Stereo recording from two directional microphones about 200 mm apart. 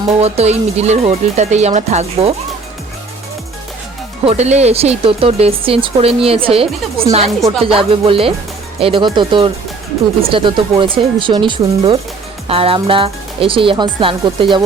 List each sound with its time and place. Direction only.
0.2 s speech: 30° right (ahead or behind)
4.3 s speech: 35° right (ahead or behind)